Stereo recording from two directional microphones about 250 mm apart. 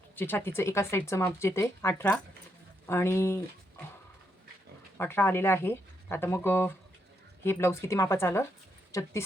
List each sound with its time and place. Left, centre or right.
0.2 s speech: centre
4.9 s speech: centre